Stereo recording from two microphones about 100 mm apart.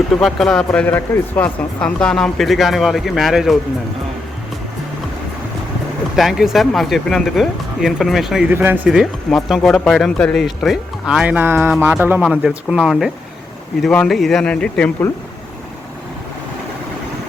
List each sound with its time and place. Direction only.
0.1 s speech: centre (ahead or behind)
6.1 s speech: 5° right (ahead or behind)
8.4 s speech: 20° right (ahead or behind)
8.9 s speech: 5° right (ahead or behind)
11.3 s speech: 20° right (ahead or behind)
12.5 s speech: 5° right (ahead or behind)
14.1 s speech: centre (ahead or behind)